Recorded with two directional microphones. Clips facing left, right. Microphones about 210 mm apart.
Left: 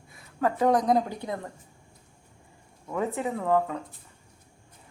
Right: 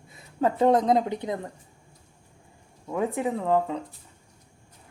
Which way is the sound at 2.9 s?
15° right (ahead or behind).